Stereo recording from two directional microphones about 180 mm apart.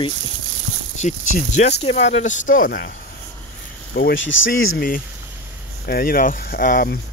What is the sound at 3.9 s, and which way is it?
Speech, 75° left (ahead or behind).